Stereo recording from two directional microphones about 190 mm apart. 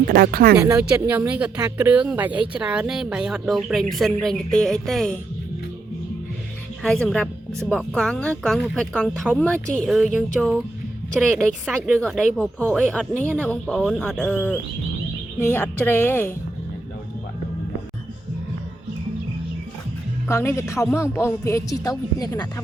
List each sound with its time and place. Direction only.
0.1 s speech: 55° right (ahead or behind)
0.6 s speech: 15° right (ahead or behind); by 5.1 s centre (ahead or behind)
6.8 s speech: 5° left (ahead or behind)
20.2 s speech: 15° left (ahead or behind)